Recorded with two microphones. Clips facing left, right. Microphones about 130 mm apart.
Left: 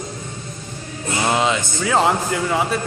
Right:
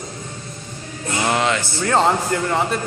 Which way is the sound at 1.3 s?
15° left (ahead or behind).